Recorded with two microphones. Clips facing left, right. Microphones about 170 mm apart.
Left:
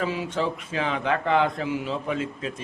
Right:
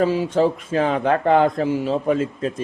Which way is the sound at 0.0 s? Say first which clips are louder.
Right 9 dB; 40° right (ahead or behind).